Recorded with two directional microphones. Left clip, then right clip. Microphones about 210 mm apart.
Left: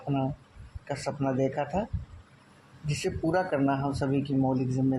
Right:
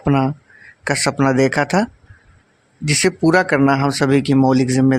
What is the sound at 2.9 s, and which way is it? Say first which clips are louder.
Speech: right 14 dB; 55° right (ahead or behind).